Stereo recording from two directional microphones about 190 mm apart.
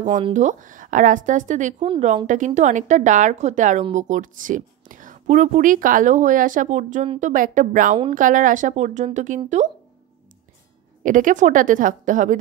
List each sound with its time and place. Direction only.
0.3 s speech: 40° right (ahead or behind)
11.0 s speech: 45° right (ahead or behind)